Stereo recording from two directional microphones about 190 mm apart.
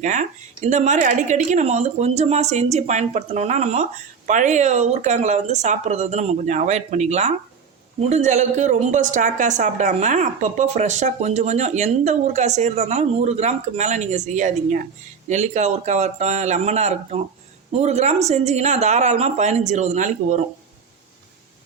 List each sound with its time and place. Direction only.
0.0 s speech: 40° right (ahead or behind)